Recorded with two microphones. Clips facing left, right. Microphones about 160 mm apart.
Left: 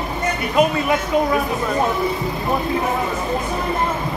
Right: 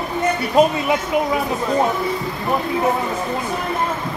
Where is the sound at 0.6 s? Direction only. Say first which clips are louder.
Right 2 dB; 35° right (ahead or behind).